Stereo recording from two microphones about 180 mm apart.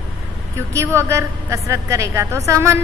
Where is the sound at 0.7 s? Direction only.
15° right (ahead or behind).